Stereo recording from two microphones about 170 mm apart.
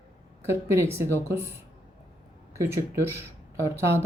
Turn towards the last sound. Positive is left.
turn(degrees=-15)  # may be behind; listen again after turning